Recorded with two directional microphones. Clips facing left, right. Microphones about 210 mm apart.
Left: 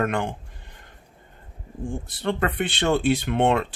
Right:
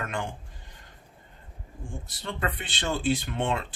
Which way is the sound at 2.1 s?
55° left (ahead or behind).